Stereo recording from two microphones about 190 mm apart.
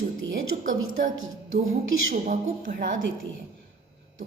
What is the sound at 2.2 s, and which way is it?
Speech, 45° right (ahead or behind).